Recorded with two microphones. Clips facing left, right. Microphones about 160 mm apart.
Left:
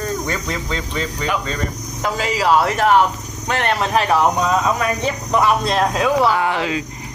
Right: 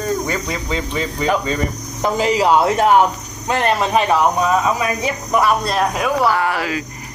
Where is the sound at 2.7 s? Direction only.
Centre (ahead or behind).